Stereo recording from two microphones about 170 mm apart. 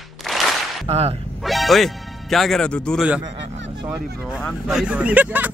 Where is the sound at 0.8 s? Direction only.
35° right (ahead or behind).